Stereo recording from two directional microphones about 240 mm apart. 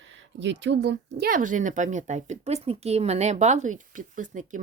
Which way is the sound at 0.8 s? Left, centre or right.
Right.